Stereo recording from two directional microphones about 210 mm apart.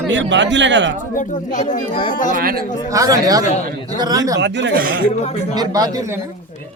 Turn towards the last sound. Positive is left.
turn(degrees=-15)  # may be behind; listen again after turning